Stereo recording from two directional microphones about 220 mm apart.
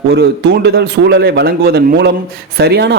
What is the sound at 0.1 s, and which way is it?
A man's voice, 50° right (ahead or behind).